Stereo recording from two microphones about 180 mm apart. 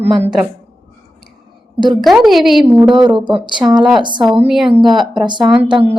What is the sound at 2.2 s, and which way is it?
Speech, centre (ahead or behind).